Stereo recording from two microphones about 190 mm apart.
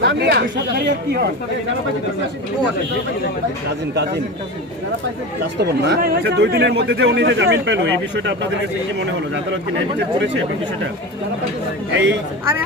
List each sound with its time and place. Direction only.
0.0 s speech: 65° right (ahead or behind)
5.5 s speech: 60° right (ahead or behind)
11.9 s speech: 70° right (ahead or behind)